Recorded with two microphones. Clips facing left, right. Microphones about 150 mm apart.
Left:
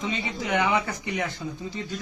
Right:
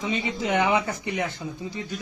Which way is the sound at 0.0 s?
20° right (ahead or behind).